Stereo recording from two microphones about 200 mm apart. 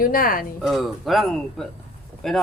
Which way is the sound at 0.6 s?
Centre (ahead or behind).